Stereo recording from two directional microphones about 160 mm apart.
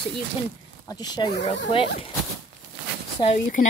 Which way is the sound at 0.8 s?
25° left (ahead or behind).